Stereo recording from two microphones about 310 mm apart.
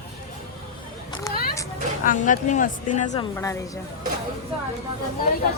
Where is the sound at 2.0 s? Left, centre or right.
Left.